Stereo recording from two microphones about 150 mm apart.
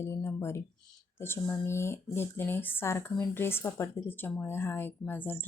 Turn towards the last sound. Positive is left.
turn(degrees=10)  # may be behind; listen again after turning